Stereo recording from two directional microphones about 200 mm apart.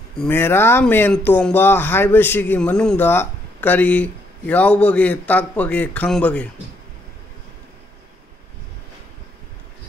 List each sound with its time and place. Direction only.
0.2 s speech: 10° left (ahead or behind)